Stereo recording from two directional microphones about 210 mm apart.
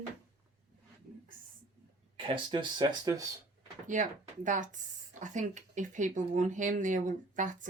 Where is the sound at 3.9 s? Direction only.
35° right (ahead or behind).